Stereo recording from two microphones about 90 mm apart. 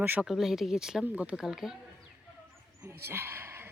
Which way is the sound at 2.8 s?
30° right (ahead or behind).